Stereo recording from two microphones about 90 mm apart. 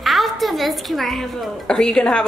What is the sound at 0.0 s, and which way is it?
Speech, centre (ahead or behind).